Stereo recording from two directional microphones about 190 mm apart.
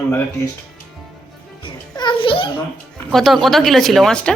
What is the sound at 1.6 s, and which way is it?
Music, 25° left (ahead or behind).